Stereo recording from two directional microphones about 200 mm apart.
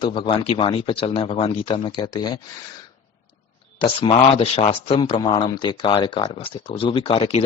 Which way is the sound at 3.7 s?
25° left (ahead or behind).